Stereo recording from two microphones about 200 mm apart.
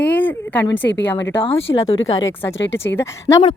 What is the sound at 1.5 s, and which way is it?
Speech, 30° left (ahead or behind).